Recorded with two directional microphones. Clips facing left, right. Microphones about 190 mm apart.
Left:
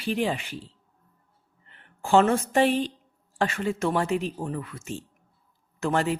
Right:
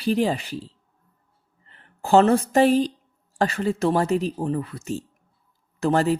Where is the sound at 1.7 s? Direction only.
35° right (ahead or behind).